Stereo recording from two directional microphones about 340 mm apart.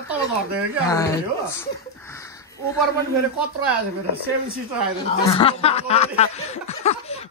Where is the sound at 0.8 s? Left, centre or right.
Centre.